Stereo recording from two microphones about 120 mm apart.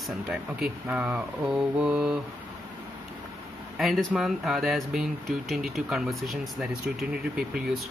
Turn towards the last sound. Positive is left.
turn(degrees=-5)  # may be behind; listen again after turning